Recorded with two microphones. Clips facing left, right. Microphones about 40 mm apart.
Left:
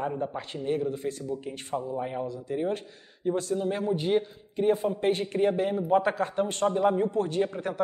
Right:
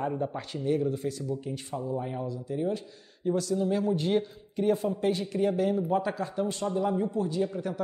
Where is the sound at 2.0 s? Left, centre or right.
Left.